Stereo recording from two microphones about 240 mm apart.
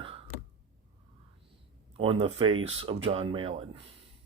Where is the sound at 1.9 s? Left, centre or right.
Right.